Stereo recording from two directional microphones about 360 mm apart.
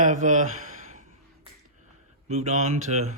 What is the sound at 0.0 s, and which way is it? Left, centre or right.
Speech, right.